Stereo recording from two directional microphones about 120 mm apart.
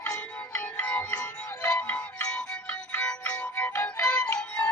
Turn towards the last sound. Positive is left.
turn(degrees=10)  # may be behind; listen again after turning